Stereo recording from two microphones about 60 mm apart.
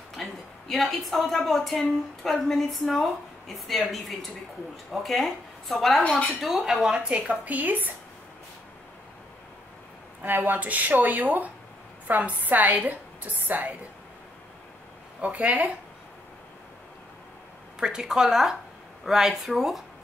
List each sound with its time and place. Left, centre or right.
0.1 s a woman's voice: centre; by 7.9 s right
10.2 s a woman's voice: right
15.2 s a woman's voice: right
17.7 s speech: centre